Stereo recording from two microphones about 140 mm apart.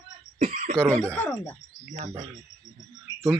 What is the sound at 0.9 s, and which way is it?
Speech, 10° left (ahead or behind).